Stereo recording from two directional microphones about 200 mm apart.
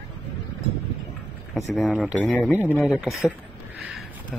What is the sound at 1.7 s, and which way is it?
Speech, centre (ahead or behind).